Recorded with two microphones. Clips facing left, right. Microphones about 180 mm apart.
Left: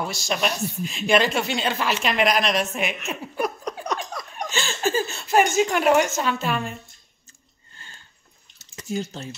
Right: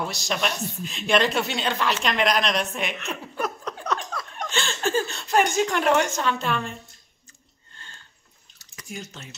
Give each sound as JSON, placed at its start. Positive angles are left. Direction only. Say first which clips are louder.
{"t": 0.0, "sound": "speech", "louder": "left 2 dB", "side_deg": 0}
{"t": 4.5, "sound": "speech", "louder": "left 1 dB", "side_deg": 5}
{"t": 8.5, "sound": "drip", "louder": "left 9 dB", "side_deg": 25}